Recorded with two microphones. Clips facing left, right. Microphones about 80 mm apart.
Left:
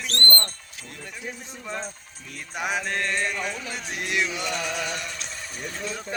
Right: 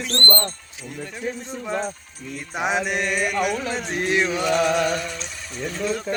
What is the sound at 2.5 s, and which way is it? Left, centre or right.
Mantra, right.